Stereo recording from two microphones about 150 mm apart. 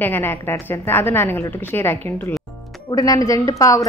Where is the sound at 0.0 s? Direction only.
15° left (ahead or behind).